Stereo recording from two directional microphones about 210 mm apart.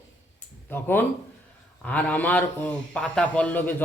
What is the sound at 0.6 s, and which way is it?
A man's voice, 10° left (ahead or behind).